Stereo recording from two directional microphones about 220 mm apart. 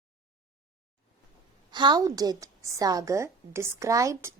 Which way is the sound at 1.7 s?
20° right (ahead or behind).